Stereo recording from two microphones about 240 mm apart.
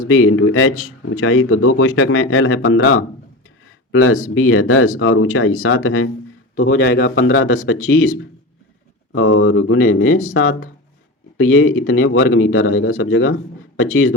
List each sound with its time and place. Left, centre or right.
0.1 s speech: left
6.7 s speech: left
7.2 s speech: left